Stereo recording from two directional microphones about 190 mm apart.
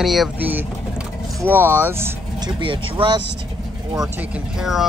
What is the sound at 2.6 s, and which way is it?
Speech, 25° right (ahead or behind).